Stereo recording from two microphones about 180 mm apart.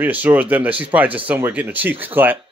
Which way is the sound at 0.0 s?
10° right (ahead or behind).